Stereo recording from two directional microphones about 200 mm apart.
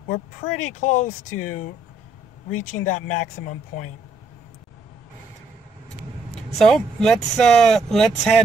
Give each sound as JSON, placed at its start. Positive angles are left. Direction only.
{"t": 0.1, "sound": "speech", "side_deg": 40}
{"t": 6.6, "sound": "speech", "side_deg": 0}